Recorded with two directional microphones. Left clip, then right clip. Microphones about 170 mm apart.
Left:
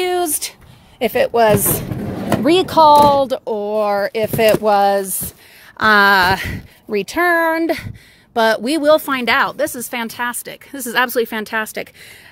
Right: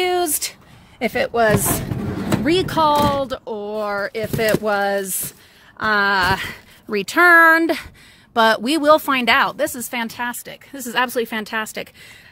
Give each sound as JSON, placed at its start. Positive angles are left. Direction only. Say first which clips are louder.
{"t": 0.0, "sound": "a sound", "louder": "left 1 dB", "side_deg": -5}
{"t": 2.4, "sound": "speech", "louder": "left 7 dB", "side_deg": 5}
{"t": 3.3, "sound": "speech", "louder": "left 6 dB", "side_deg": 15}
{"t": 5.8, "sound": "speech", "louder": "left 6 dB", "side_deg": 25}
{"t": 6.2, "sound": "speech", "louder": "left 3 dB", "side_deg": 5}